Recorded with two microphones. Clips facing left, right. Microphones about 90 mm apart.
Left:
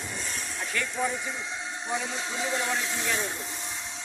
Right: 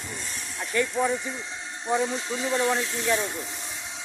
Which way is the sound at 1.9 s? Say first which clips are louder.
Right 8 dB; 30° right (ahead or behind).